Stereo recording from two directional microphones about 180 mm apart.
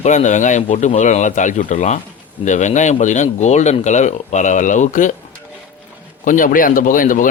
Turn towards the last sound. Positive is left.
turn(degrees=45)  # may be behind; listen again after turning